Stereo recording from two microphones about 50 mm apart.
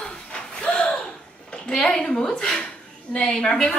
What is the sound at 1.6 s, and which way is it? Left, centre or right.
A woman's voice, centre.